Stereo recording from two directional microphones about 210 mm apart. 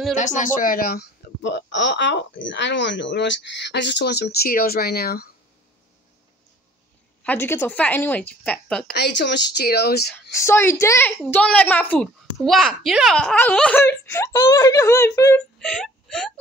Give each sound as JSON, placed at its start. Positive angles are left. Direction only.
{"t": 0.1, "sound": "speech", "side_deg": 35}
{"t": 7.2, "sound": "a woman's voice", "side_deg": 10}
{"t": 8.9, "sound": "speech", "side_deg": 55}
{"t": 10.1, "sound": "a woman's voice", "side_deg": 10}
{"t": 15.6, "sound": "speech", "side_deg": 5}